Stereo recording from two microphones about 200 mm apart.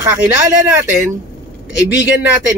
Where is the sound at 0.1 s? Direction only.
10° right (ahead or behind).